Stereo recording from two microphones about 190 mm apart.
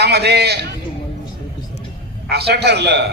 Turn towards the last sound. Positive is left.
turn(degrees=-60)  # may be behind; listen again after turning